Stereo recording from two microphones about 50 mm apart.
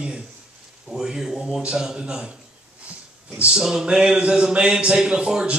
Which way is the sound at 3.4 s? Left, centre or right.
Centre.